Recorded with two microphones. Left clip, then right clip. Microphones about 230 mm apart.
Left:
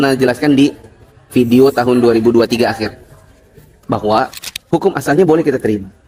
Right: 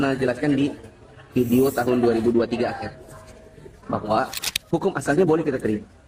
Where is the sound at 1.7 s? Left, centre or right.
Left.